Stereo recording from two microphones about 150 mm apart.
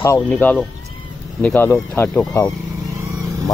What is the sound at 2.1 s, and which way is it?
Speech, 5° left (ahead or behind).